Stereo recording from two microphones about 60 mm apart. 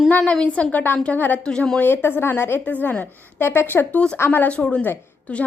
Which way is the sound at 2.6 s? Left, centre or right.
Left.